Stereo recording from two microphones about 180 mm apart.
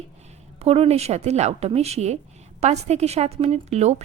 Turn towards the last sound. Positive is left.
turn(degrees=-35)  # may be behind; listen again after turning